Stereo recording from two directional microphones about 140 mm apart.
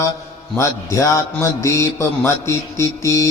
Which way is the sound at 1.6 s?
20° left (ahead or behind).